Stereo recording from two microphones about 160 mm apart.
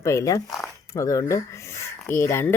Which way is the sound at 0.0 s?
20° left (ahead or behind).